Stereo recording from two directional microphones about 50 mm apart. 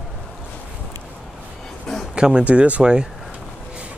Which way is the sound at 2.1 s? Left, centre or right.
Centre.